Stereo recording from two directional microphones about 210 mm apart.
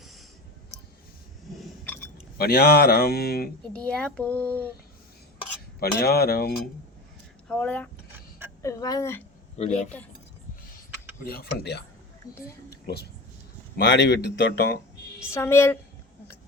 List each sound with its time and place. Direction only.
1.5 s a sound: 5° left (ahead or behind)
2.4 s speech: 50° left (ahead or behind)
3.7 s a child's voice: 5° left (ahead or behind)
5.8 s speech: 50° left (ahead or behind)
7.4 s a child's voice: 5° left (ahead or behind)
9.6 s speech: 30° left (ahead or behind)
11.2 s speech: 45° left (ahead or behind)
12.2 s a child's voice: 20° left (ahead or behind)
12.7 s a woman's voice: 50° left (ahead or behind)
15.3 s a child's voice: 15° left (ahead or behind)